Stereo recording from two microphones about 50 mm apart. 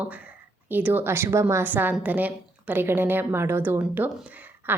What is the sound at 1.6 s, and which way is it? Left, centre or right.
Speech, right.